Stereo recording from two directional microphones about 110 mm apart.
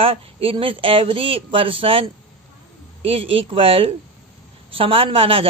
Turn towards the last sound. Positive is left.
turn(degrees=-60)  # may be behind; listen again after turning